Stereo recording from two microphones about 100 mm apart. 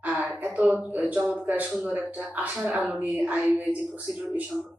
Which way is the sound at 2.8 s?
Centre (ahead or behind).